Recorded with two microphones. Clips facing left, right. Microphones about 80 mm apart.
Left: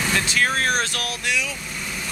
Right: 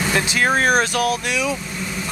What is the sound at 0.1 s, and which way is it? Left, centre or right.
Speech, centre.